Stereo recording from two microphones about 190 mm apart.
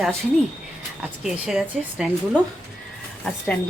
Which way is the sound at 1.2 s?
5° right (ahead or behind).